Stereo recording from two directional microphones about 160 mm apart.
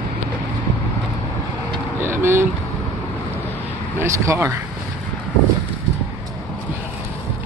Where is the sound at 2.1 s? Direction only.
15° right (ahead or behind).